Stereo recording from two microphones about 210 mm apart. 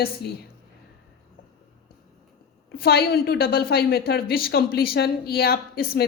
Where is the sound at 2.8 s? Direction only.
50° left (ahead or behind).